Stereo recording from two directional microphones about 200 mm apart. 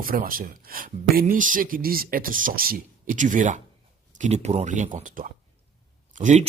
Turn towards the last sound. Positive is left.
turn(degrees=-35)  # may be behind; listen again after turning